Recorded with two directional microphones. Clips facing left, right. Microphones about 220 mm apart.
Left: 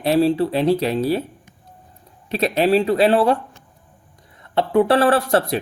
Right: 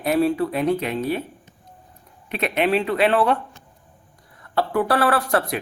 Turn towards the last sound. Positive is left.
turn(degrees=30)  # may be behind; listen again after turning